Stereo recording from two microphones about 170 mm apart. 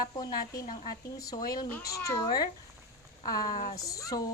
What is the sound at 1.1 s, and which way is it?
A woman's voice, 20° left (ahead or behind).